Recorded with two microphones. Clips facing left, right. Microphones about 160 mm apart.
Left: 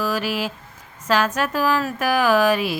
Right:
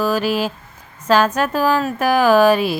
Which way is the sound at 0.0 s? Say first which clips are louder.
Right 5 dB; 35° right (ahead or behind).